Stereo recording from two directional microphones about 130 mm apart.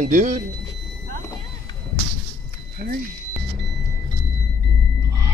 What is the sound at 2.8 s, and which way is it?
Speech, 90° right.